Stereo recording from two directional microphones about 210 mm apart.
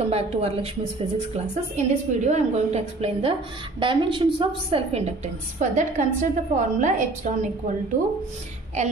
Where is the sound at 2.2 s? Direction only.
30° right (ahead or behind).